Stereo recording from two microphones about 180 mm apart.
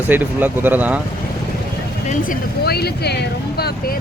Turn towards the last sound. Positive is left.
turn(degrees=60)  # may be behind; listen again after turning